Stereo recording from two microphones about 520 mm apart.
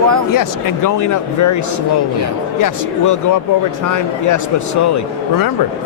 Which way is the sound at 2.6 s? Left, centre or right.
Left.